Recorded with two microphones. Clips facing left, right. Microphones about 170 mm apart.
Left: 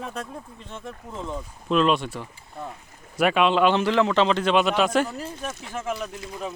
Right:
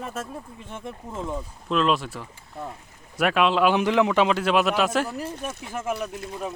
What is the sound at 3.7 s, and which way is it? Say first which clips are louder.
Speech: even; 15° right (ahead or behind).